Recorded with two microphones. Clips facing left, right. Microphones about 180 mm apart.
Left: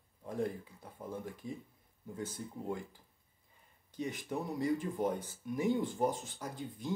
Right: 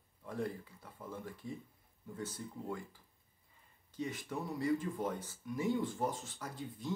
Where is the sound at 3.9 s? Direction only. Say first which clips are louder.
Left 2 dB; 15° left (ahead or behind).